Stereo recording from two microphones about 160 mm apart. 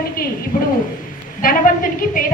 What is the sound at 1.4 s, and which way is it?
Speech, 60° left (ahead or behind).